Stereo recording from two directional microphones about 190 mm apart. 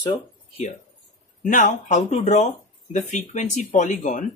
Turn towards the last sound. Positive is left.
turn(degrees=40)  # may be behind; listen again after turning